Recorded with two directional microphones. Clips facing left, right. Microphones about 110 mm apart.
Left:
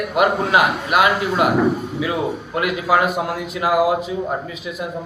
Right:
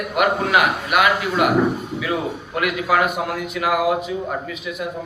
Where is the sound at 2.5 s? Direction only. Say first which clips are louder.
Left 1 dB; 25° left (ahead or behind).